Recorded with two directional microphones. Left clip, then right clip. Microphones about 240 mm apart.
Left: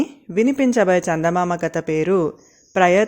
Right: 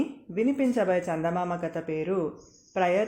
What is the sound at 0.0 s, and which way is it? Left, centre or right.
Speech, left.